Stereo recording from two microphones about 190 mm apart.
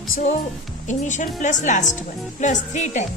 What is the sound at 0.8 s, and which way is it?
A woman's voice, 40° left (ahead or behind).